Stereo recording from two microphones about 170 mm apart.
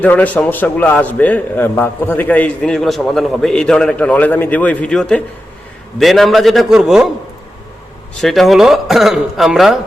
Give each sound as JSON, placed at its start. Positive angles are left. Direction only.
{"t": 0.0, "sound": "a man's voice", "side_deg": 10}
{"t": 8.2, "sound": "a man's voice", "side_deg": 0}